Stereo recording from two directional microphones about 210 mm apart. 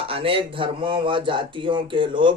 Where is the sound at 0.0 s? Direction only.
25° right (ahead or behind).